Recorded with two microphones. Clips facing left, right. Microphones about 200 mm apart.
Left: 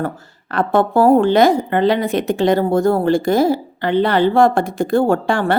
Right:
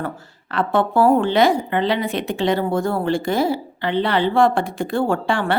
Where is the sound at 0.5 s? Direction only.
45° left (ahead or behind).